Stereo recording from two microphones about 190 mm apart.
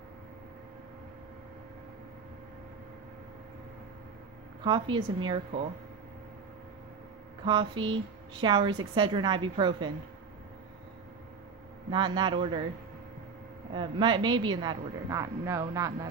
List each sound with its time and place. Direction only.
4.6 s a woman's voice: 25° right (ahead or behind)
7.4 s a woman's voice: 25° right (ahead or behind)
11.9 s a woman's voice: 25° right (ahead or behind)
13.7 s a woman's voice: 25° right (ahead or behind)